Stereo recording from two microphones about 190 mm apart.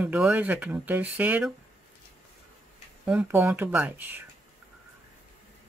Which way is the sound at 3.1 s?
10° right (ahead or behind).